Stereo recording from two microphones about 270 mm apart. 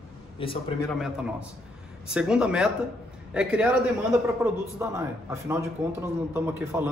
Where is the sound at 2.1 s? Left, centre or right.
Centre.